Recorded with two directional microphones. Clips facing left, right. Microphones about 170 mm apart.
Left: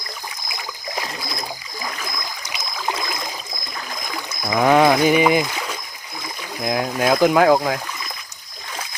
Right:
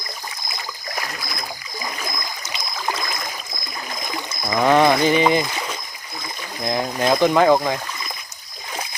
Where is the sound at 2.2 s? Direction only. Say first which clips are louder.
Even; 10° left (ahead or behind).